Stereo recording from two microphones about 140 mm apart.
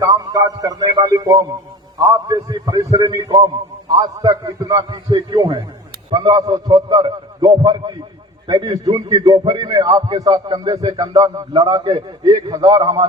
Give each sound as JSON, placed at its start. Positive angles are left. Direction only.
{"t": 0.0, "sound": "a man's voice", "side_deg": -25}